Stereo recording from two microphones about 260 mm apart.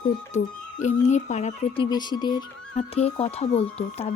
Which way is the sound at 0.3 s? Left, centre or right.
Left.